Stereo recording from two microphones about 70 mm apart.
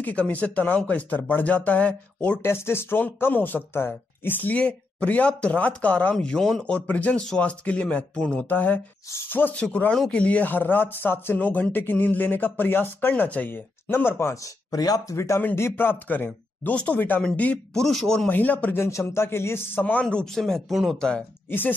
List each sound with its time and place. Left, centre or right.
0.0 s speech: left
2.4 s speech: left; by 6.1 s centre
6.2 s speech: centre
6.6 s speech: centre
8.5 s speech: left
9.6 s speech: centre; by 15.1 s left
15.1 s speech: left
15.5 s speech: left; by 17.6 s centre
17.7 s speech: centre
18.3 s speech: left
18.8 s speech: left; by 20.7 s centre
20.7 s speech: centre
21.5 s speech: left